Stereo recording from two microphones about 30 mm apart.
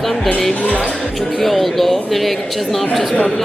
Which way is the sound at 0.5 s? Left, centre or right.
Left.